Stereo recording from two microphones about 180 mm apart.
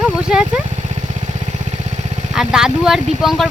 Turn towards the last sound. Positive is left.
turn(degrees=0)  # may be behind; listen again after turning